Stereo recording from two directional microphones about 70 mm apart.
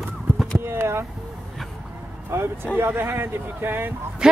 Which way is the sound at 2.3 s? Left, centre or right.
Right.